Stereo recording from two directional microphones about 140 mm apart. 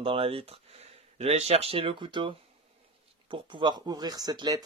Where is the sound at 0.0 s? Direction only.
40° right (ahead or behind).